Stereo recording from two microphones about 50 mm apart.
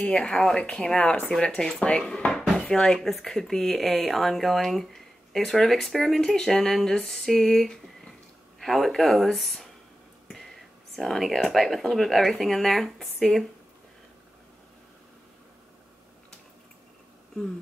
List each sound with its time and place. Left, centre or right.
0.1 s speech: centre
10.2 s whispering: centre
11.0 s speech: centre